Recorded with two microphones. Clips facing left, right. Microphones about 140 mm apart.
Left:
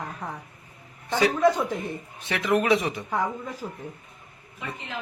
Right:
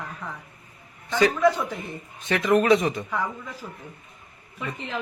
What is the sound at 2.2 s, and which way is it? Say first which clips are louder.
Speech: right 3 dB; 15° left (ahead or behind).